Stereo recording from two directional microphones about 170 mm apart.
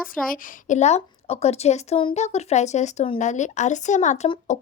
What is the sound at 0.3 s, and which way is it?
A woman's voice, 50° left (ahead or behind).